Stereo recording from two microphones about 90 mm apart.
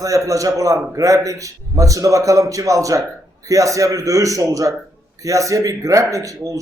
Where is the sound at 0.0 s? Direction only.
40° right (ahead or behind).